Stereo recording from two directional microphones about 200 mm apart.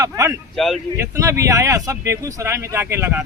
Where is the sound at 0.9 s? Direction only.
15° right (ahead or behind).